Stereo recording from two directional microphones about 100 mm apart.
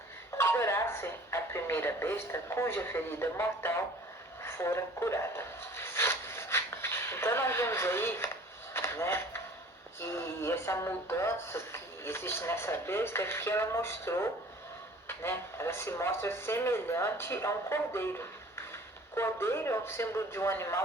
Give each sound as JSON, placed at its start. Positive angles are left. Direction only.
{"t": 0.3, "sound": "speech", "side_deg": 25}
{"t": 8.7, "sound": "a sound", "side_deg": 25}
{"t": 10.0, "sound": "speech", "side_deg": 25}